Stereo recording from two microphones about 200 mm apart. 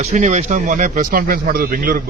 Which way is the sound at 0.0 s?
35° right (ahead or behind).